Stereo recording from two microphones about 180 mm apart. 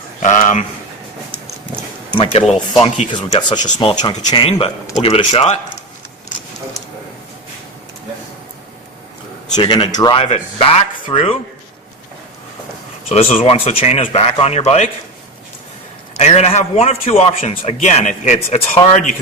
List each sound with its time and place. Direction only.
0.2 s a man's voice: 40° left (ahead or behind)
2.0 s speech: 30° left (ahead or behind)
4.9 s a man's voice: 35° left (ahead or behind)
9.6 s speech: 25° left (ahead or behind)
10.2 s a man's voice: 40° left (ahead or behind)
13.1 s a man's voice: 35° left (ahead or behind)
16.1 s a man's voice: 35° left (ahead or behind)